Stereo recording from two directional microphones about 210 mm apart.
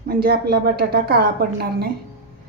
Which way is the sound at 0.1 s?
45° right (ahead or behind).